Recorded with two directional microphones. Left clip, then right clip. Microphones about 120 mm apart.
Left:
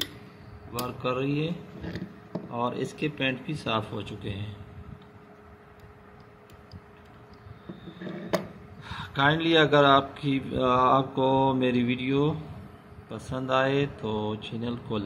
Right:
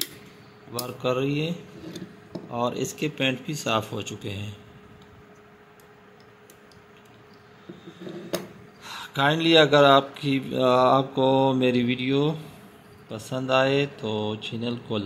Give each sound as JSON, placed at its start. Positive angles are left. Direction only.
{"t": 0.8, "sound": "speech", "side_deg": -55}
{"t": 2.5, "sound": "speech", "side_deg": -55}
{"t": 8.8, "sound": "speech", "side_deg": -50}